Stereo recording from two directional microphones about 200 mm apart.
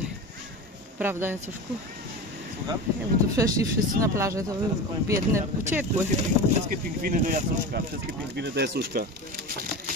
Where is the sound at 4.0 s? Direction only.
15° right (ahead or behind).